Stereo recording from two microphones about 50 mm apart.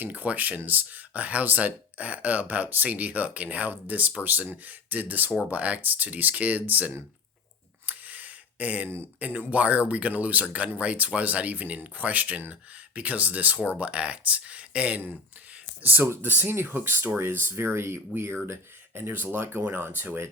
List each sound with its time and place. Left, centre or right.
0.0 s speech: right
7.9 s a sound: right
9.5 s speech: right
15.8 s speech: right